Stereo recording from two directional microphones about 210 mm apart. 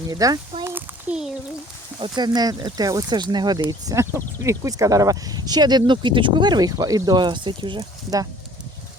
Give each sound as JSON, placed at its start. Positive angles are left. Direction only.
{"t": 0.1, "sound": "speech", "side_deg": -15}
{"t": 0.6, "sound": "a sound", "side_deg": -10}
{"t": 2.0, "sound": "speech", "side_deg": -20}